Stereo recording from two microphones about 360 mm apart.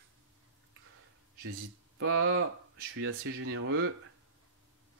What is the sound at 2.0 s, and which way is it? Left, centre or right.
Speech, right.